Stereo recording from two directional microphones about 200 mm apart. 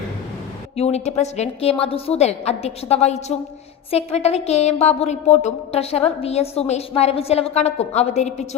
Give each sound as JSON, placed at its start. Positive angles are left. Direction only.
{"t": 0.8, "sound": "speech", "side_deg": 30}